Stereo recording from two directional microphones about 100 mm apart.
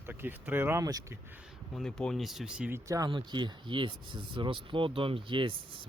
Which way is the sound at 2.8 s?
35° right (ahead or behind).